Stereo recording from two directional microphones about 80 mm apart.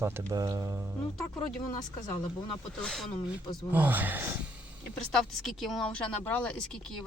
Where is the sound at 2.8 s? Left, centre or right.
Centre.